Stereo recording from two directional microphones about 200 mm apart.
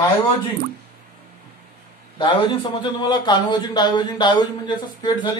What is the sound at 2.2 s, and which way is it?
A man's voice, 25° left (ahead or behind).